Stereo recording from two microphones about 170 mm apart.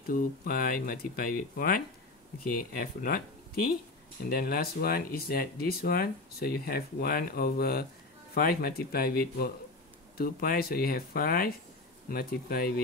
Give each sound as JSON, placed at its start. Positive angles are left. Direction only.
{"t": 0.1, "sound": "speech", "side_deg": 60}
{"t": 2.8, "sound": "speech", "side_deg": 60}
{"t": 4.3, "sound": "speech", "side_deg": 60}